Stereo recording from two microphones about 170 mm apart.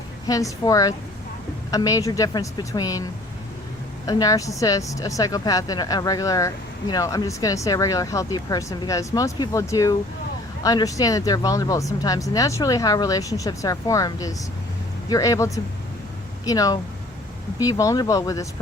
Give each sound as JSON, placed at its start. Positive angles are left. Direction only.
{"t": 0.3, "sound": "speech", "side_deg": 20}
{"t": 4.0, "sound": "speech", "side_deg": 20}